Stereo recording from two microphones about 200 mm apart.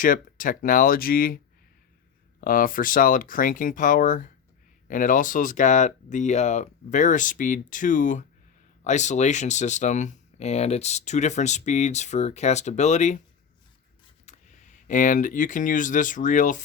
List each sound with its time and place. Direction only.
0.0 s speech: 40° left (ahead or behind)
2.4 s speech: 45° left (ahead or behind)
14.3 s speech: 40° left (ahead or behind)